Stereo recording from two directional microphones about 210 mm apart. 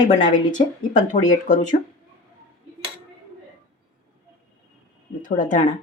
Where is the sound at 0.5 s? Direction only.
35° left (ahead or behind).